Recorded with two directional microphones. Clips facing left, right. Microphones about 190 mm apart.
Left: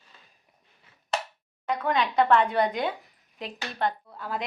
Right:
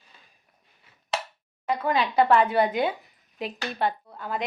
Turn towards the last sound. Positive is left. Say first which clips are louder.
# right 1 dB
turn(degrees=0)  # may be behind; listen again after turning